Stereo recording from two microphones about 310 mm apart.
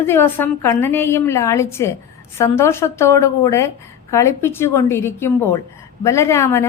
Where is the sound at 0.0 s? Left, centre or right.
Centre.